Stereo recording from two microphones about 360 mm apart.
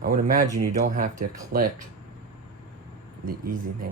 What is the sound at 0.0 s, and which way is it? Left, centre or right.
Speech, right.